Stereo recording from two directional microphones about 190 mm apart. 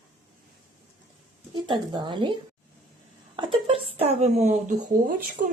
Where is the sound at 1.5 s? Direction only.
25° right (ahead or behind).